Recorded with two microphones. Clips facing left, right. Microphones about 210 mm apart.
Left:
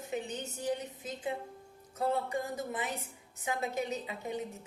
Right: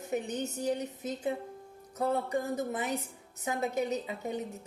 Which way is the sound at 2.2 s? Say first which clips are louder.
Right 4 dB; 35° right (ahead or behind).